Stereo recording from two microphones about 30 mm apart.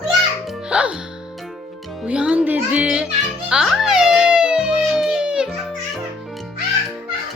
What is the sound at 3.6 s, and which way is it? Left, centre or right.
Speech, centre.